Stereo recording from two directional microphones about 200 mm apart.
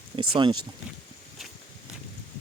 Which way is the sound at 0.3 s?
25° right (ahead or behind).